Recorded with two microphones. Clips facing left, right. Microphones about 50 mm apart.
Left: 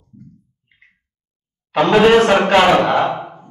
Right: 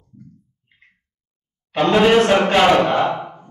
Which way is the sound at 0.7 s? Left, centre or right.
Centre.